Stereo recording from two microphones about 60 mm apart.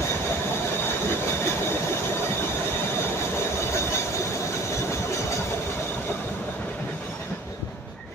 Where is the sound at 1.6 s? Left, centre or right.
Left.